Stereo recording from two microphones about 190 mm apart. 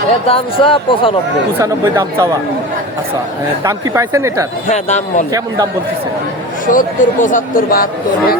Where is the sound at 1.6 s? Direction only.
15° right (ahead or behind).